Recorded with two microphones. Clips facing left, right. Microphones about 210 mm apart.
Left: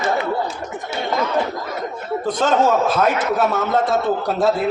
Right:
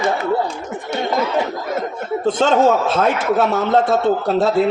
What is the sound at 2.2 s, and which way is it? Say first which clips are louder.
A man's voice: right 3 dB; 25° right (ahead or behind).